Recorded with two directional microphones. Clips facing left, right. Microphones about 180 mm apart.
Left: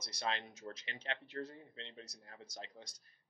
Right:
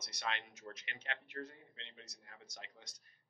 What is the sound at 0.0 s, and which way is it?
Speech, 30° left (ahead or behind).